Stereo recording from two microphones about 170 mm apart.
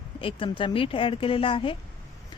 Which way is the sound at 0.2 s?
30° left (ahead or behind).